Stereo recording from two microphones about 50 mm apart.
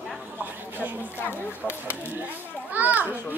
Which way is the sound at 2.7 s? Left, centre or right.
Right.